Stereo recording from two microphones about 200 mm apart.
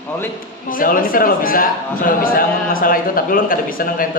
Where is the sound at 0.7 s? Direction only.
45° left (ahead or behind).